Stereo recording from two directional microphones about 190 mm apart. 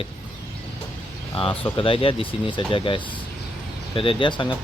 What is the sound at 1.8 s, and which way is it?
Speech, 30° left (ahead or behind).